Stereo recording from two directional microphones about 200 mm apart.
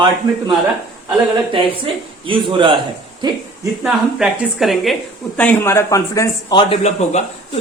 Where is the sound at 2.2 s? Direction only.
25° right (ahead or behind).